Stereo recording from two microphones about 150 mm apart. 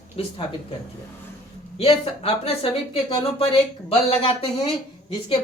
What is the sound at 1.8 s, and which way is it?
Speech, 40° left (ahead or behind).